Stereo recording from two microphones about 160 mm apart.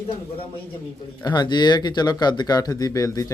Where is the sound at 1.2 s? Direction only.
25° left (ahead or behind).